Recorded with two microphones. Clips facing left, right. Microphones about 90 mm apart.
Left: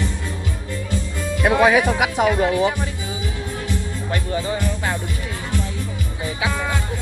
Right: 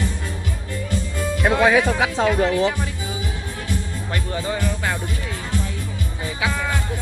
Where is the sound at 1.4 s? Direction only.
15° left (ahead or behind).